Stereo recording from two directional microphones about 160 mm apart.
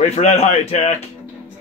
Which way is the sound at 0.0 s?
40° left (ahead or behind).